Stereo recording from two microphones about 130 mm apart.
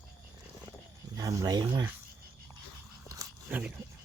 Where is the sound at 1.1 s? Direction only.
30° right (ahead or behind).